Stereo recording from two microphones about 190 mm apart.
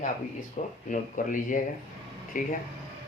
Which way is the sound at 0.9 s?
45° left (ahead or behind).